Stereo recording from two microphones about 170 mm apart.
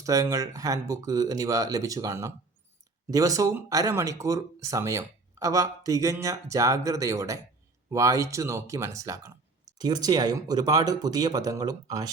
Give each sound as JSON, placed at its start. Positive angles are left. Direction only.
{"t": 0.0, "sound": "speech", "side_deg": -20}